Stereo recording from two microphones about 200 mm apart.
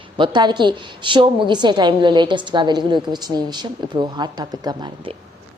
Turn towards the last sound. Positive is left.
turn(degrees=-20)  # may be behind; listen again after turning